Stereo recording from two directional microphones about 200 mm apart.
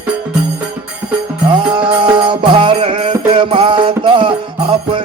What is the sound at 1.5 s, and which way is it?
Music, 25° right (ahead or behind).